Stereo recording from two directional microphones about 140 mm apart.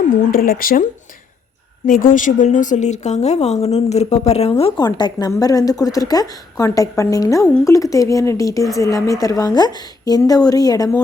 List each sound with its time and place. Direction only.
0.3 s speech: 90° left
1.9 s speech: 75° left (ahead or behind); by 4.7 s 45° left (ahead or behind)
4.8 s a woman's voice: 30° left (ahead or behind)